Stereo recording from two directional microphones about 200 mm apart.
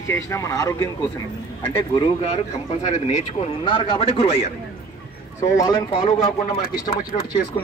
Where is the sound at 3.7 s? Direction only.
25° left (ahead or behind).